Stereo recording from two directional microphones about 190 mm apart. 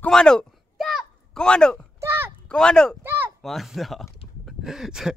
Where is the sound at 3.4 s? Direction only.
Centre (ahead or behind).